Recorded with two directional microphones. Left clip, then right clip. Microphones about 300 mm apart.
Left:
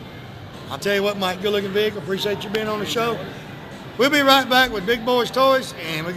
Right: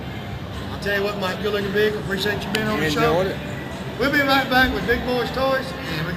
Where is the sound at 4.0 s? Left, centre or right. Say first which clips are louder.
Left 3 dB; left.